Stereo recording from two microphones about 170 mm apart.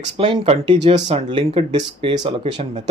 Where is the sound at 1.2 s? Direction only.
25° right (ahead or behind).